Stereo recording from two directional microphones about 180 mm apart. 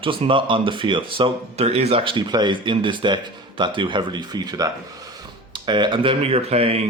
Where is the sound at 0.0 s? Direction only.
30° right (ahead or behind).